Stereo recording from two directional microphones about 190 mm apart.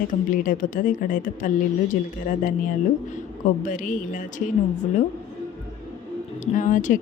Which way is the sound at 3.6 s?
45° left (ahead or behind).